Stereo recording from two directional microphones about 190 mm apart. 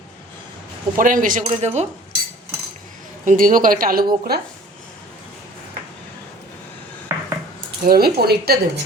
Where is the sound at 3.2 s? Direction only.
45° right (ahead or behind).